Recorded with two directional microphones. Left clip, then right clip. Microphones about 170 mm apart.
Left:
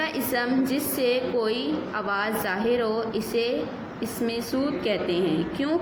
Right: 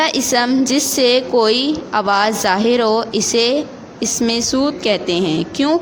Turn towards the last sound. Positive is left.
turn(degrees=-50)  # may be behind; listen again after turning